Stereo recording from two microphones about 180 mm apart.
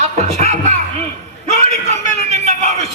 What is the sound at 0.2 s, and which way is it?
Music, 40° right (ahead or behind).